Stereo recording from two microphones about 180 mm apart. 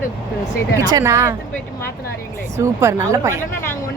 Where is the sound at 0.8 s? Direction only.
20° right (ahead or behind).